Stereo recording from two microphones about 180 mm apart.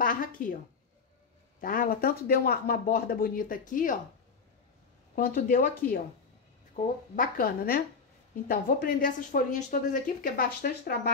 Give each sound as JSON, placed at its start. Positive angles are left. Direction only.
{"t": 0.0, "sound": "a woman's voice", "side_deg": 50}
{"t": 1.6, "sound": "speech", "side_deg": 50}
{"t": 5.1, "sound": "speech", "side_deg": 50}